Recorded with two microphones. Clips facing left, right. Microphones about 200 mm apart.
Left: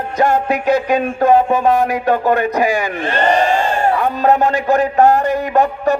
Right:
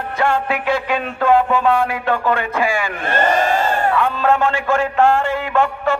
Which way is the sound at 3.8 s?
40° left (ahead or behind).